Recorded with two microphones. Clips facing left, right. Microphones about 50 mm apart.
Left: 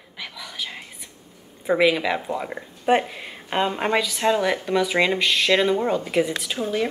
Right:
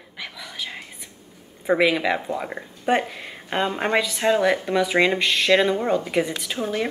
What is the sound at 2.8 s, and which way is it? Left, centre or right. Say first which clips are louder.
Speech: left 2 dB; centre.